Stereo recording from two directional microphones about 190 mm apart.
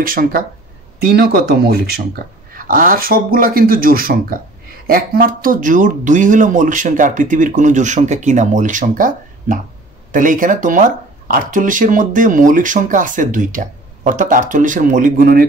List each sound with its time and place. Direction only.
0.0 s speech: 50° right (ahead or behind)